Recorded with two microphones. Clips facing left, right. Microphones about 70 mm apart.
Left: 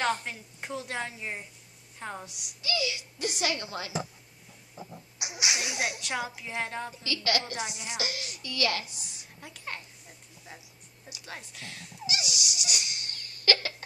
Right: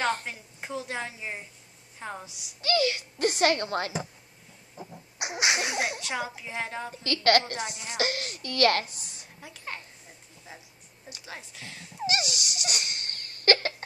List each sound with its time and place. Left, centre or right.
0.2 s a woman's voice: centre
2.6 s a child's voice: right
5.2 s a child's voice: right
5.8 s a woman's voice: centre
6.9 s a child's voice: right
7.5 s speech: centre
8.0 s a child's voice: right
9.4 s a woman's voice: centre
12.1 s a sound: right